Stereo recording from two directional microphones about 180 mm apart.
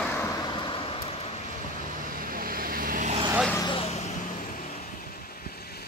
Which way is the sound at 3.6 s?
35° left (ahead or behind).